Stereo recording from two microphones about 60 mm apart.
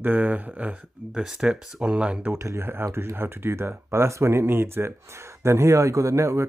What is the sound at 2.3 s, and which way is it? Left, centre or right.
Speech, right.